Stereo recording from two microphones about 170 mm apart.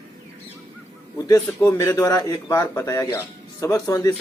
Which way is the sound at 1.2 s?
20° left (ahead or behind).